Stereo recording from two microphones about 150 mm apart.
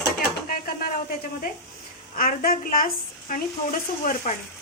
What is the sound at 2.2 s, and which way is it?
Speech, 70° left (ahead or behind).